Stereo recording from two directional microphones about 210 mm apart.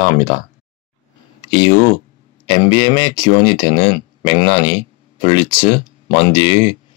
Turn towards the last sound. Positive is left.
turn(degrees=25)  # may be behind; listen again after turning